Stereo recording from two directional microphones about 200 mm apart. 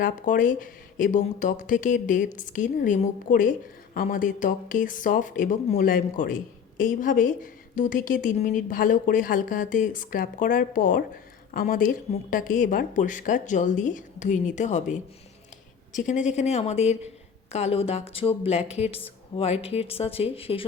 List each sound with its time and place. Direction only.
0.0 s a woman's voice: 40° left (ahead or behind)